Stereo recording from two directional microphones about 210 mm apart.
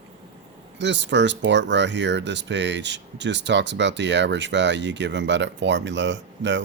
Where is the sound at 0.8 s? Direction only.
55° right (ahead or behind).